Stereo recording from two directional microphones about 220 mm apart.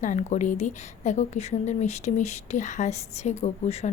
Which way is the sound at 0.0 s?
35° left (ahead or behind).